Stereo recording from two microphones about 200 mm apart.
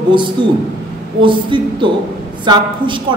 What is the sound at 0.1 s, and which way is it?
A man's voice, 25° right (ahead or behind).